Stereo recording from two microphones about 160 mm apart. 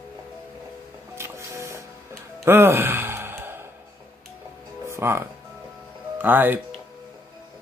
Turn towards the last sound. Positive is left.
turn(degrees=-10)  # may be behind; listen again after turning